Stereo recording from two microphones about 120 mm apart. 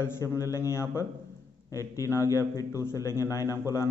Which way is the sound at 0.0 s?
25° left (ahead or behind).